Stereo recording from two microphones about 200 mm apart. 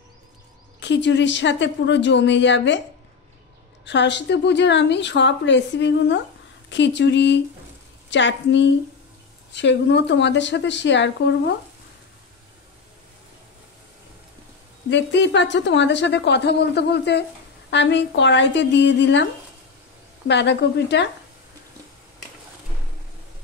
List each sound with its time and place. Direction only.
0.7 s a woman's voice: 65° left (ahead or behind)
3.8 s a woman's voice: 60° left (ahead or behind)
14.9 s a woman's voice: 60° left (ahead or behind)
20.2 s a woman's voice: 60° left (ahead or behind)